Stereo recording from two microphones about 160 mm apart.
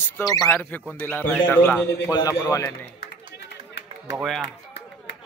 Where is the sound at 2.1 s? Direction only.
20° left (ahead or behind).